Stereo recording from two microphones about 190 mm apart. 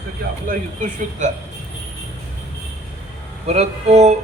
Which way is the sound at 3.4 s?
35° right (ahead or behind).